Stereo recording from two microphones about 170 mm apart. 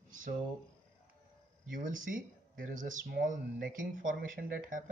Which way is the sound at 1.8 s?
50° right (ahead or behind).